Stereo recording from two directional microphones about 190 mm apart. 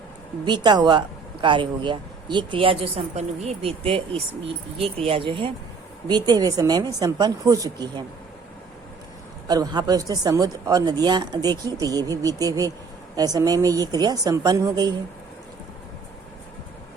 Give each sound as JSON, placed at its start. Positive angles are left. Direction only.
{"t": 0.4, "sound": "speech", "side_deg": -25}
{"t": 9.5, "sound": "speech", "side_deg": -20}